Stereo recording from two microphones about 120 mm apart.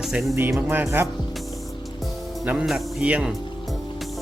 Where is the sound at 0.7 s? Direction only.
15° right (ahead or behind).